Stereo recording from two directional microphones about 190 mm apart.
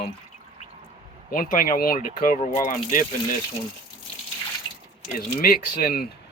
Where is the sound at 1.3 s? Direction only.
45° left (ahead or behind).